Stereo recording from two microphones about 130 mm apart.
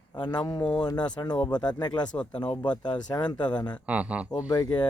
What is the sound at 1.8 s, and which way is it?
Speech, 30° left (ahead or behind).